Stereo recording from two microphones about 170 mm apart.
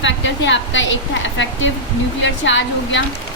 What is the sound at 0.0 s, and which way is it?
A woman's voice, 90° left.